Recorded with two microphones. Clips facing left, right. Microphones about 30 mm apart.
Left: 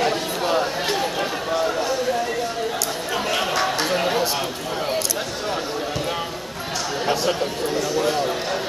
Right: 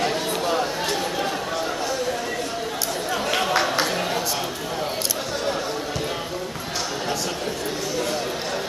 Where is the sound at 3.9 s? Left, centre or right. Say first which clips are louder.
Left 4 dB; centre.